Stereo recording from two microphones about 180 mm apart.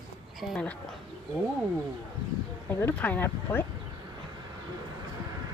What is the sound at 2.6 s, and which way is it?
Speech, 10° left (ahead or behind).